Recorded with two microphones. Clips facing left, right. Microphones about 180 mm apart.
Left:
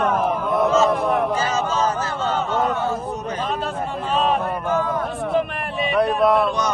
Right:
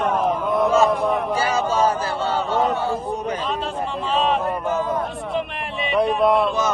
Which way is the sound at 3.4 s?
50° left (ahead or behind).